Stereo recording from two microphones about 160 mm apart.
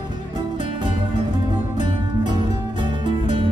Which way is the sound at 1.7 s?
30° right (ahead or behind).